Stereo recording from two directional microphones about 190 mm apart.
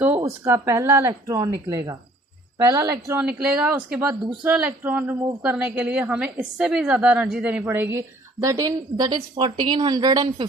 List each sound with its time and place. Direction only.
0.2 s a woman's voice: 15° right (ahead or behind)
3.2 s a woman's voice: 5° right (ahead or behind); by 10.4 s 20° right (ahead or behind)